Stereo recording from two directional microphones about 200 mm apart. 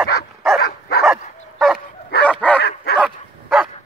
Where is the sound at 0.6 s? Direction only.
55° left (ahead or behind).